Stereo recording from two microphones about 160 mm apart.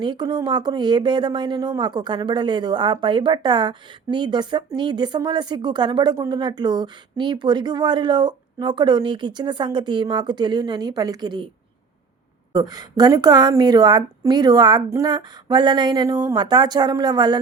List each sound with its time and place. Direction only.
0.0 s speech: 30° right (ahead or behind)
12.5 s speech: 25° right (ahead or behind)